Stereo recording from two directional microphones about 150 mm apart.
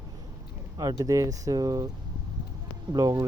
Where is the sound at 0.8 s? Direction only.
25° right (ahead or behind).